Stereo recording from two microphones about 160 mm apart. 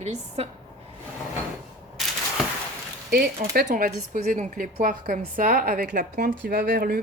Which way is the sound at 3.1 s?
70° right (ahead or behind).